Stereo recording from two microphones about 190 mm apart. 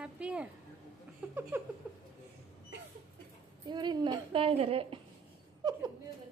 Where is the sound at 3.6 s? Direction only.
25° right (ahead or behind).